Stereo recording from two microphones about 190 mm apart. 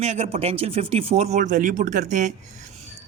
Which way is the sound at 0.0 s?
35° right (ahead or behind).